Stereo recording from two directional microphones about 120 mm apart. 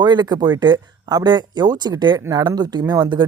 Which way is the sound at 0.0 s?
35° right (ahead or behind).